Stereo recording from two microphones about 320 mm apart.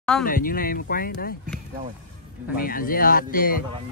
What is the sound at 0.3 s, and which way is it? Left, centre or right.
Speech, left.